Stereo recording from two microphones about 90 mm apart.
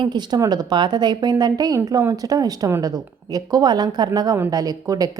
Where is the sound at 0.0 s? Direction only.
55° right (ahead or behind).